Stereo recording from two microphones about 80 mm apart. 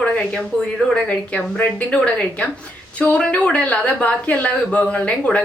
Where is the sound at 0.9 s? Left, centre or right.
Centre.